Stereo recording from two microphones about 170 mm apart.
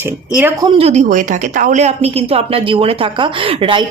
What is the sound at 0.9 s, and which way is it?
A woman's voice, 45° right (ahead or behind).